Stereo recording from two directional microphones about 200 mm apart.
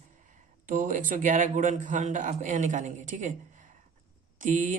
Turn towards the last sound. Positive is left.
turn(degrees=-40)  # may be behind; listen again after turning